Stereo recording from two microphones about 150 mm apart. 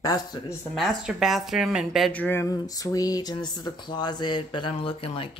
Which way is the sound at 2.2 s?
15° left (ahead or behind).